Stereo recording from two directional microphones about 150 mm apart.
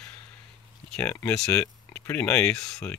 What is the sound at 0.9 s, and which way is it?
Speech, 10° left (ahead or behind).